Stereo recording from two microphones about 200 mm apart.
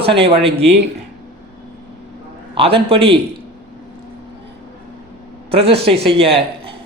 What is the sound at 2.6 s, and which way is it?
Speech, 25° right (ahead or behind).